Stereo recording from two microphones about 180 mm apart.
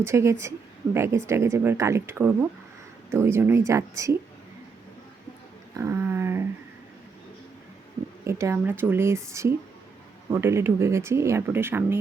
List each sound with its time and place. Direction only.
0.0 s speech: 15° right (ahead or behind)
5.7 s a sound: 15° right (ahead or behind)
8.2 s speech: 15° right (ahead or behind)